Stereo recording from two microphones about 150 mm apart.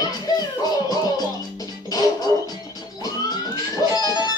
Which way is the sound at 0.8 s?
25° left (ahead or behind).